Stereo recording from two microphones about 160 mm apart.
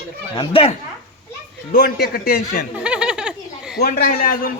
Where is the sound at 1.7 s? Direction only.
75° left (ahead or behind).